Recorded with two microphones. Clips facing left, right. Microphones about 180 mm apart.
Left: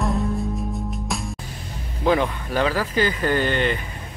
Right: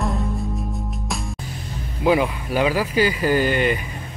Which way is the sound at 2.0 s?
10° right (ahead or behind).